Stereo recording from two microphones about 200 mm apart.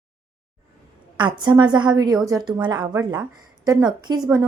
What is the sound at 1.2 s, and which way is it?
A woman's voice, 25° right (ahead or behind).